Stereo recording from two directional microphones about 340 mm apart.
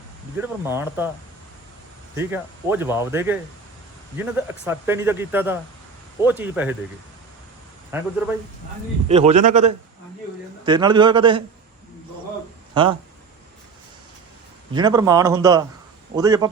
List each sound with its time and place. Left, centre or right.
0.3 s a man's voice: centre
2.1 s a man's voice: centre
7.9 s speech: centre
9.0 s a man's voice: centre
12.7 s speech: centre
14.7 s a man's voice: centre